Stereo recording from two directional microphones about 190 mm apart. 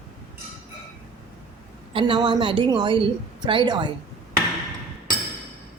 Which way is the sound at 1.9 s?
25° right (ahead or behind).